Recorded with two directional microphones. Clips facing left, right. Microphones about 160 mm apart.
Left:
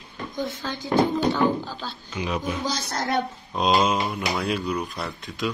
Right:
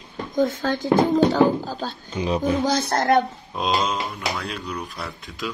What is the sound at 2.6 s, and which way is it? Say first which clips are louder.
Speech: right 7 dB; 55° right (ahead or behind).